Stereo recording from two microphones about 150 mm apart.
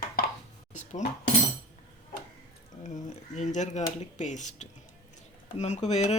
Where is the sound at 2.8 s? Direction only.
55° left (ahead or behind).